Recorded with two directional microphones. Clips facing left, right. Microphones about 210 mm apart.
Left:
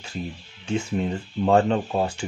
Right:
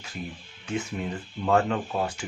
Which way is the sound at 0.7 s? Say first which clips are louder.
Left 5 dB; 30° left (ahead or behind).